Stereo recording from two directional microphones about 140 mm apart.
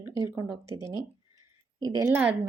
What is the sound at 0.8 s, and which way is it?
Speech, 20° right (ahead or behind).